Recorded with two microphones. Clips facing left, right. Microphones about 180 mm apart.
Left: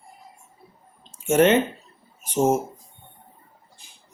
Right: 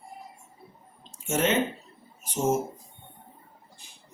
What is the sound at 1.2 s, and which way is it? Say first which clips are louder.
Speech: left 9 dB; 65° left (ahead or behind).